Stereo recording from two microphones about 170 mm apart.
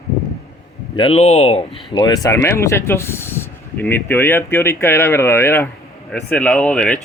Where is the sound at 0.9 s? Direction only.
35° left (ahead or behind).